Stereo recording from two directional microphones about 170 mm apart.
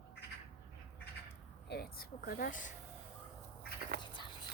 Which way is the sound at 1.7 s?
65° left (ahead or behind).